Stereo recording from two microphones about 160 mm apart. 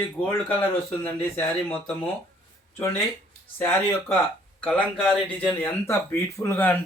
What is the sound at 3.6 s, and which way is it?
A man's voice, 15° left (ahead or behind).